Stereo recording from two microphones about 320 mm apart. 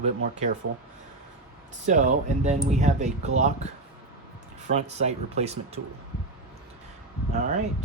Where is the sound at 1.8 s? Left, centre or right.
Right.